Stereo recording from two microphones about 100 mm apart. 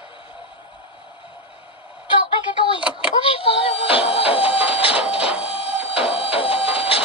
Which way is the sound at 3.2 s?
60° left (ahead or behind).